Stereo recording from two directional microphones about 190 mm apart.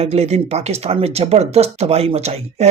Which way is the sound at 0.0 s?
35° right (ahead or behind).